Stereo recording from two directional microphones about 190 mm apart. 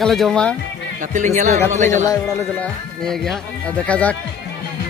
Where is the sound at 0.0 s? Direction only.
Centre (ahead or behind).